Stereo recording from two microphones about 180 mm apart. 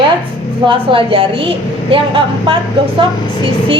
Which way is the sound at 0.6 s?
30° right (ahead or behind).